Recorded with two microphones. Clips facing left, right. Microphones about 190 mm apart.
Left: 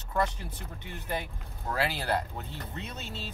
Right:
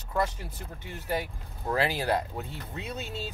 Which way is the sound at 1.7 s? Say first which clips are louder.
Right 3 dB; 15° right (ahead or behind).